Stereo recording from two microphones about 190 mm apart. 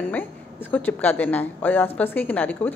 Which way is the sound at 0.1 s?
10° left (ahead or behind).